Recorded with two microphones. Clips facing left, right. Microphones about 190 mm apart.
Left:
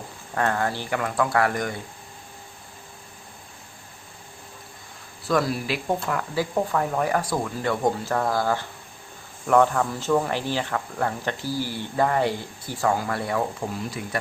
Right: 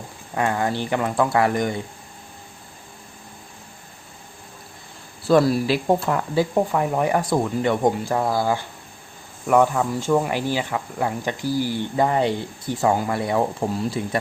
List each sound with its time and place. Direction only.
0.3 s speech: 15° right (ahead or behind)
5.3 s speech: 30° right (ahead or behind)
13.6 s speech: 30° right (ahead or behind)